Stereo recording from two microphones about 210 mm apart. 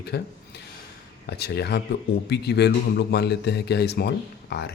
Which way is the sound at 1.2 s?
50° left (ahead or behind).